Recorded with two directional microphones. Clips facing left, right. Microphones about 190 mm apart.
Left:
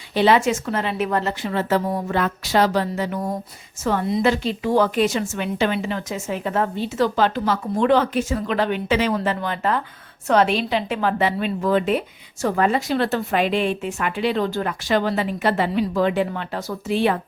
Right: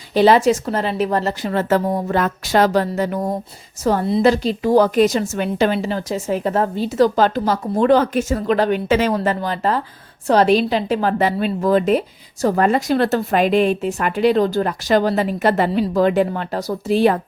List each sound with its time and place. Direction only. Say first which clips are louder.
0.1 s a woman's voice: right 4 dB; 40° right (ahead or behind)